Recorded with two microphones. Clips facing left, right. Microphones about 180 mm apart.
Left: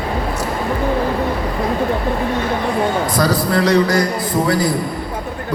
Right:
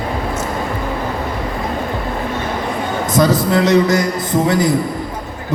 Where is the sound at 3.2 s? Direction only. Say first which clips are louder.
Right 6 dB; 20° right (ahead or behind).